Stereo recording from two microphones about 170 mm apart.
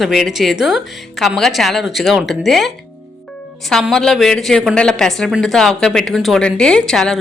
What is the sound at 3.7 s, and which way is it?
Speech, centre (ahead or behind).